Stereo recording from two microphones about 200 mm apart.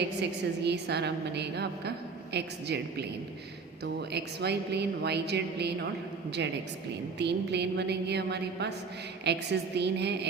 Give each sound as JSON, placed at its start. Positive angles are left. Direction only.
{"t": 0.6, "sound": "a woman's voice", "side_deg": -55}
{"t": 4.1, "sound": "a woman's voice", "side_deg": -55}
{"t": 7.2, "sound": "a woman's voice", "side_deg": -60}